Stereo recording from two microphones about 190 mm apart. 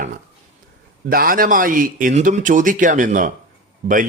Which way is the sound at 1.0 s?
50° right (ahead or behind).